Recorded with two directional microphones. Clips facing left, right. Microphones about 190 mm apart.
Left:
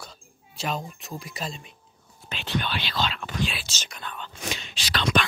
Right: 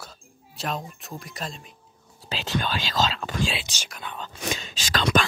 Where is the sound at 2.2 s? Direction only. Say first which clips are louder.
Right 2 dB; 40° right (ahead or behind).